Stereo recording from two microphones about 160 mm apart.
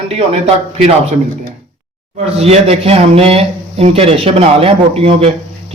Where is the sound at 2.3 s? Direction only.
40° right (ahead or behind).